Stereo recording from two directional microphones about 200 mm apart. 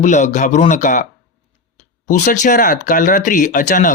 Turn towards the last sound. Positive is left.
turn(degrees=40)  # may be behind; listen again after turning